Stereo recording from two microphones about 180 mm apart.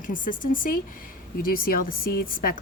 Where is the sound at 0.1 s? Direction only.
50° left (ahead or behind).